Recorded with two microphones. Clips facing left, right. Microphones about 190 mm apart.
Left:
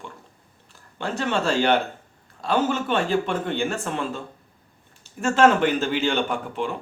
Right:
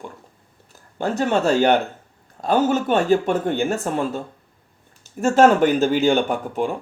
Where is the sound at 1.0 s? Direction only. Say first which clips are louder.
Right 5 dB; 45° right (ahead or behind).